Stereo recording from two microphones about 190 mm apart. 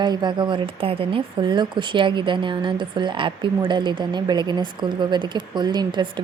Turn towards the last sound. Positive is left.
turn(degrees=-25)  # may be behind; listen again after turning